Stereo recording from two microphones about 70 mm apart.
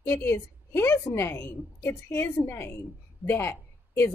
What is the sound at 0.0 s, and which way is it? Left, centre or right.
A woman's voice, left.